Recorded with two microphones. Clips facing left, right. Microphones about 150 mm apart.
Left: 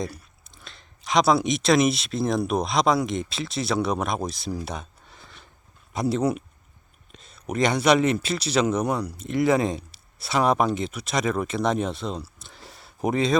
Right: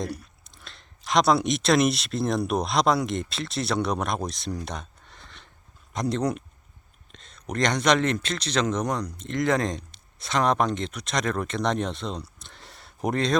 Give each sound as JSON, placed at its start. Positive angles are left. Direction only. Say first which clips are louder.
{"t": 0.0, "sound": "a man's voice", "louder": "even", "side_deg": 0}